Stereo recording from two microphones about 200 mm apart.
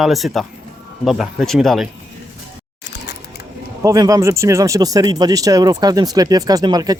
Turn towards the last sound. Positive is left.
turn(degrees=-20)  # may be behind; listen again after turning